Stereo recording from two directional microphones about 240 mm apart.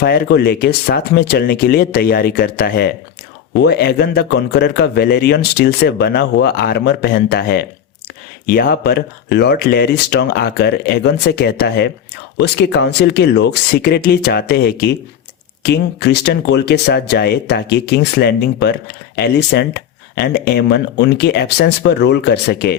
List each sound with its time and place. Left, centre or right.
0.0 s speech: left